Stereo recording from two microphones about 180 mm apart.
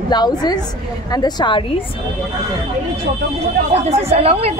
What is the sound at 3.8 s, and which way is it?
Speech, 35° right (ahead or behind).